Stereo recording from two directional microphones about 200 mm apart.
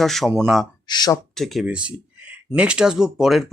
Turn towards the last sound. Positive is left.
turn(degrees=0)  # may be behind; listen again after turning